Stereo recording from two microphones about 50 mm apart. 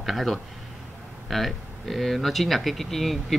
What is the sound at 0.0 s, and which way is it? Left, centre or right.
Speech, centre.